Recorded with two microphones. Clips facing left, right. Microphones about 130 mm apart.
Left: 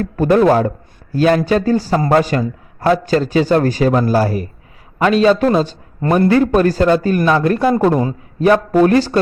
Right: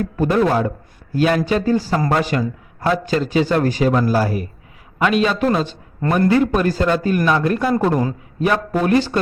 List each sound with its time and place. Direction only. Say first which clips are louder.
0.0 s a man's voice: left 5 dB; 45° left (ahead or behind)